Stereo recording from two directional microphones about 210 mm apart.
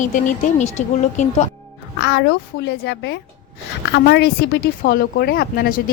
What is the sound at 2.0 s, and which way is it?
A child's voice, 60° left (ahead or behind).